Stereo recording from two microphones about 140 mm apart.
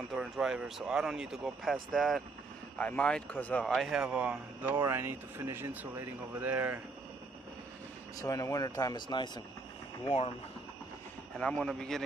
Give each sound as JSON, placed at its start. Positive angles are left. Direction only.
{"t": 0.1, "sound": "speech", "side_deg": -5}
{"t": 3.6, "sound": "speech", "side_deg": 0}
{"t": 8.2, "sound": "speech", "side_deg": 25}
{"t": 11.3, "sound": "speech", "side_deg": 5}